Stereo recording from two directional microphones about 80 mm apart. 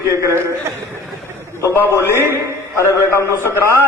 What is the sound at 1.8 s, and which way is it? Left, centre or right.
Speech, right.